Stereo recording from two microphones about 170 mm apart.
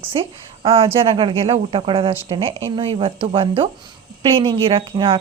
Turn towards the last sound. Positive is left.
turn(degrees=-30)  # may be behind; listen again after turning